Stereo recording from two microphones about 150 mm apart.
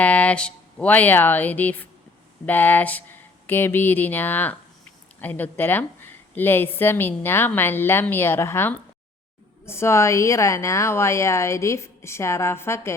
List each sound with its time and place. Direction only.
0.0 s a woman's voice: 10° left (ahead or behind)